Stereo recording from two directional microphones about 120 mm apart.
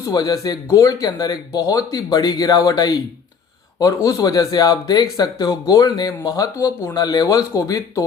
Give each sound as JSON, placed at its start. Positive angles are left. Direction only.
{"t": 0.0, "sound": "speech", "side_deg": 30}